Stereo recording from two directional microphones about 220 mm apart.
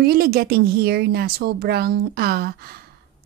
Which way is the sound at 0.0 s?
45° right (ahead or behind).